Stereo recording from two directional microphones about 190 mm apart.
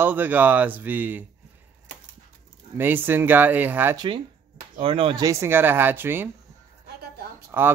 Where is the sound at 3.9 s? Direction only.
25° right (ahead or behind).